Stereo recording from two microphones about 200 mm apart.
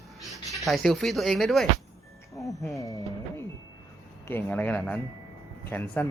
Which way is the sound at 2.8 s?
15° left (ahead or behind).